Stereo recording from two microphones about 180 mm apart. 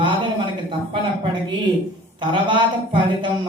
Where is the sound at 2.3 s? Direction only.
25° right (ahead or behind).